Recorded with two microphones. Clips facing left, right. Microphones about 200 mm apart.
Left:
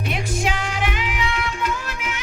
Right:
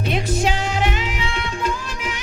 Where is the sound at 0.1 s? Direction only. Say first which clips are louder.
Right 4 dB; 30° right (ahead or behind).